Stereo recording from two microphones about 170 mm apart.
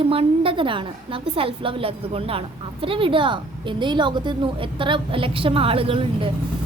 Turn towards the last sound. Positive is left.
turn(degrees=-30)  # may be behind; listen again after turning